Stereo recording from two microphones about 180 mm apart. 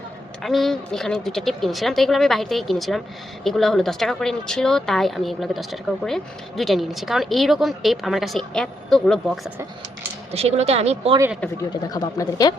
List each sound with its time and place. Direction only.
0.4 s speech: centre (ahead or behind)
10.3 s speech: 35° right (ahead or behind)
11.9 s speech: 20° left (ahead or behind)